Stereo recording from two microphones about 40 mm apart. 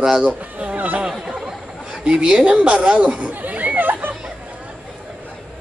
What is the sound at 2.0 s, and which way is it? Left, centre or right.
Speech, centre.